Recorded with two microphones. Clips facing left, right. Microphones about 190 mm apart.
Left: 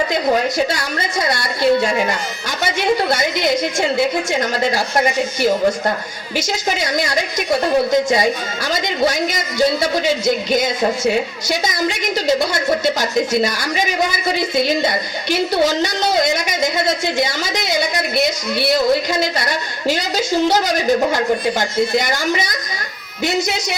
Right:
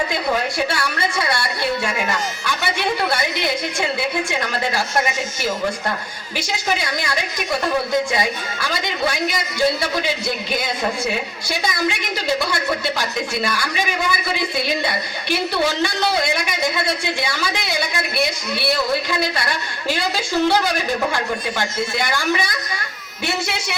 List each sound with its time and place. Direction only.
1.3 s speech: 40° left (ahead or behind)
6.3 s speech: 45° left (ahead or behind)
9.0 s speech: 45° left (ahead or behind)
19.1 s speech: 45° left (ahead or behind)